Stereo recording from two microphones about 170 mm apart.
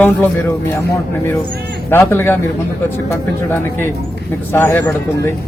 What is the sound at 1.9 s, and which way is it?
A man's voice, 15° left (ahead or behind).